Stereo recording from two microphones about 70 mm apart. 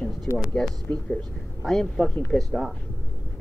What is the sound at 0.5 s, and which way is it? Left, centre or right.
Speech, centre.